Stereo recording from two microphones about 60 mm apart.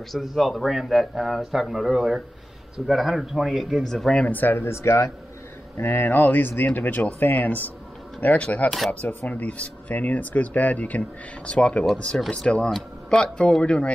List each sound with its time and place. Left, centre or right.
0.1 s a man's voice: centre
4.3 s speech: left
5.8 s speech: left
8.6 s a man's voice: centre
9.3 s a man's voice: left